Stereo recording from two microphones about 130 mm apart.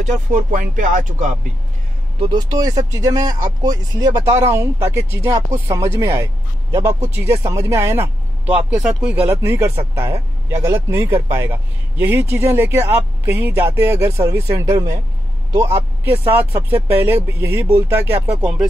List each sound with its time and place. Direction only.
0.0 s speech: 75° right (ahead or behind)
2.1 s speech: 30° right (ahead or behind); by 18.7 s 10° right (ahead or behind)